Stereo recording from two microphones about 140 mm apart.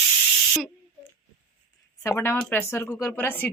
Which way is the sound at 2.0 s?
20° left (ahead or behind).